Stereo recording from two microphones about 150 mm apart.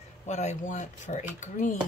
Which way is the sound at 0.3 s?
50° left (ahead or behind).